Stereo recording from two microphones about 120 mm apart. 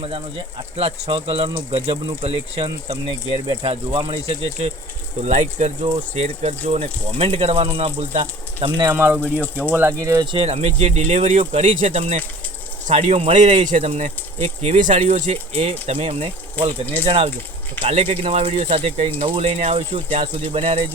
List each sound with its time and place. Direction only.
0.8 s speech: 55° right (ahead or behind)
5.2 s speech: 75° right (ahead or behind)
5.9 s speech: 60° right (ahead or behind)
8.9 s speech: 15° right (ahead or behind)
10.3 s speech: 60° right (ahead or behind)